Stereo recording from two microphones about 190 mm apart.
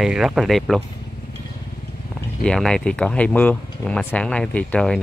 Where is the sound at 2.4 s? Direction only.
5° left (ahead or behind).